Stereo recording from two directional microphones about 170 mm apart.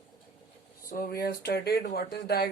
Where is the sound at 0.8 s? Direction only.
60° left (ahead or behind).